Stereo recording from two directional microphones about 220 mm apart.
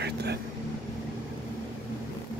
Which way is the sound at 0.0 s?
50° right (ahead or behind).